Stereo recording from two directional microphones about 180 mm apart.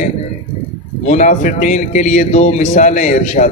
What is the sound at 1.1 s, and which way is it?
A man's voice, 45° left (ahead or behind).